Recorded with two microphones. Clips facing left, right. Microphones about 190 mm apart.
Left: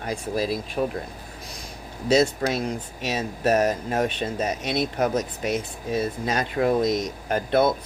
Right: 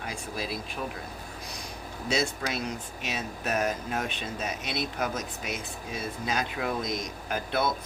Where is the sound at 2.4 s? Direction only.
50° left (ahead or behind).